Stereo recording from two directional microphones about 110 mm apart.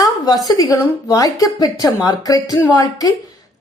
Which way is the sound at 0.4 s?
35° left (ahead or behind).